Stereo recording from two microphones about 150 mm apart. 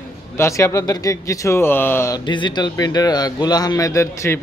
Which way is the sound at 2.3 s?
30° left (ahead or behind).